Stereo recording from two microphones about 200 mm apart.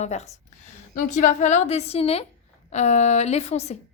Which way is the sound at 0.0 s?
35° left (ahead or behind).